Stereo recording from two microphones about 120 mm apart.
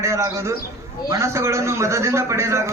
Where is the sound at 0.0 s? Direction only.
25° right (ahead or behind).